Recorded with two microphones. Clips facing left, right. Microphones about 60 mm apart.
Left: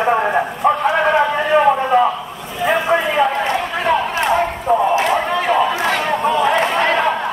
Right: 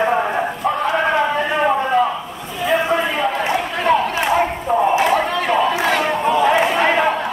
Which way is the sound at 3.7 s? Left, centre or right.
Centre.